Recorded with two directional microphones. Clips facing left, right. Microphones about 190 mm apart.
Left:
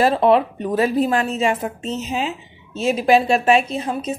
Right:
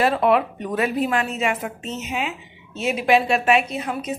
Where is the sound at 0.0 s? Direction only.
30° left (ahead or behind).